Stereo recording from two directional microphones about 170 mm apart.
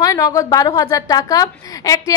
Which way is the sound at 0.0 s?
20° left (ahead or behind).